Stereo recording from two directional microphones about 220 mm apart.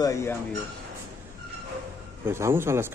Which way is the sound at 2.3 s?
10° right (ahead or behind).